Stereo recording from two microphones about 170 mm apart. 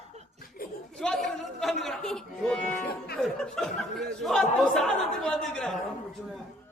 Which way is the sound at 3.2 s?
Centre (ahead or behind).